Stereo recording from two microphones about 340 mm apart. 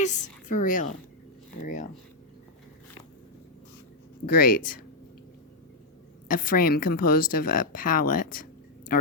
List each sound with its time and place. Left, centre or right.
0.0 s a woman's voice: left
4.3 s speech: left
6.2 s speech: left